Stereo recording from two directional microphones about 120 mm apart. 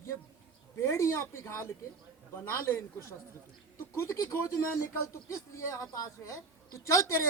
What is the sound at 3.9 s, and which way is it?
Speech, 25° left (ahead or behind).